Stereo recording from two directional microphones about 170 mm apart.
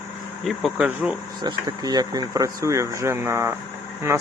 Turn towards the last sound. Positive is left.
turn(degrees=-15)  # may be behind; listen again after turning